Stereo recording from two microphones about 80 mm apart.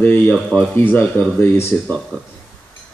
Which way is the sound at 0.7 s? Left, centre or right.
Left.